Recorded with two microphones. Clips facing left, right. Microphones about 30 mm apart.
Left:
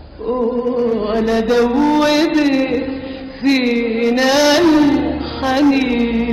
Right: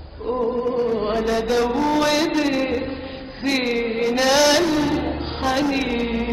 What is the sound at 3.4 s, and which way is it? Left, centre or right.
Music, centre.